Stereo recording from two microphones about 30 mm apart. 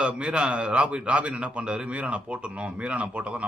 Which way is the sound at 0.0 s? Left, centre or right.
Right.